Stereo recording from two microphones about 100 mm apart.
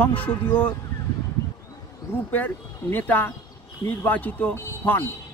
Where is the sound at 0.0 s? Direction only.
15° left (ahead or behind).